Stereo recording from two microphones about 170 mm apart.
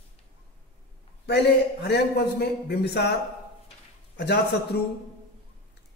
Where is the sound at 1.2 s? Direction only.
80° left.